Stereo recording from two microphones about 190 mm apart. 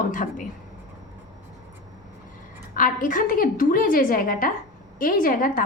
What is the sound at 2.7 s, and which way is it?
A woman's voice, 45° left (ahead or behind).